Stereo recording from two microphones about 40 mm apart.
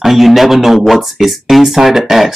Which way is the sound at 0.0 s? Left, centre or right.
Centre.